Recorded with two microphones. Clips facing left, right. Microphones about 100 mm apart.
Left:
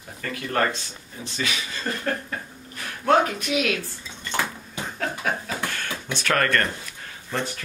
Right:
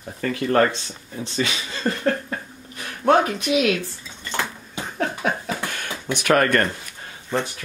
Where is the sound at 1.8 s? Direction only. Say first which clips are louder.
Right 6 dB; 30° right (ahead or behind).